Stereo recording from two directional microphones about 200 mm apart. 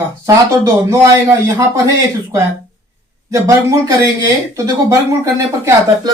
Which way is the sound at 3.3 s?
15° right (ahead or behind).